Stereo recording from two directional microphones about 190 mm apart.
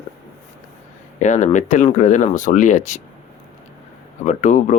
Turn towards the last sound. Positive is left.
turn(degrees=40)  # may be behind; listen again after turning